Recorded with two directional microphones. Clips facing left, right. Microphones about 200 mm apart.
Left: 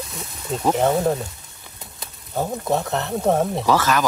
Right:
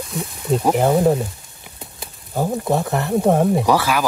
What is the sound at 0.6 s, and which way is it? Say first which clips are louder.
Speech: right 2 dB; 10° right (ahead or behind).